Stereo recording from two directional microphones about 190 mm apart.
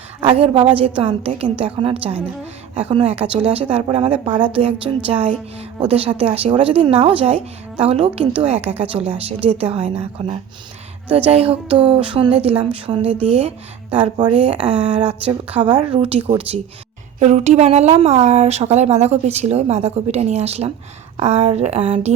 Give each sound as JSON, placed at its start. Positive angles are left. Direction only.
{"t": 0.3, "sound": "a woman's voice", "side_deg": -30}